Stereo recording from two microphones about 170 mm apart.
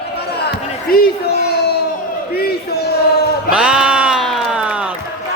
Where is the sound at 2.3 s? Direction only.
70° left (ahead or behind).